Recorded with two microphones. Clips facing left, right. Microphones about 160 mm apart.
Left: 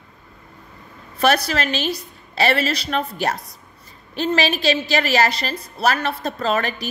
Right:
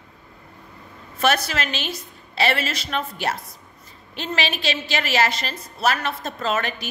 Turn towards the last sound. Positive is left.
turn(degrees=40)  # may be behind; listen again after turning